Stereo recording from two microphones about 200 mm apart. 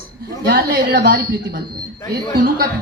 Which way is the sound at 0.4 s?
45° right (ahead or behind).